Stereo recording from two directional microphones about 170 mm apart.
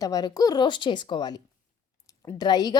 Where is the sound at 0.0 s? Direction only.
20° left (ahead or behind).